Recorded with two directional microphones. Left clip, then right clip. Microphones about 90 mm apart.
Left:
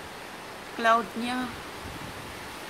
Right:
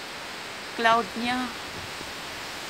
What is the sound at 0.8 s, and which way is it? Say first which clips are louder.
Speech: right 1 dB; 15° right (ahead or behind).